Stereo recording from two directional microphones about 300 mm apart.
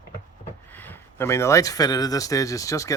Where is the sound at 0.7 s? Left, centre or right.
Centre.